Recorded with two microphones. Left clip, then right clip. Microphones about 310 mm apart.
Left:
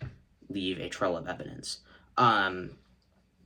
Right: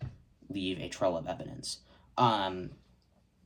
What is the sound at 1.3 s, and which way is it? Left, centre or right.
Speech, centre.